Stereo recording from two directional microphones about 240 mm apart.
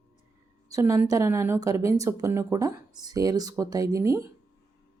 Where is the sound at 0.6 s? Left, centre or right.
Centre.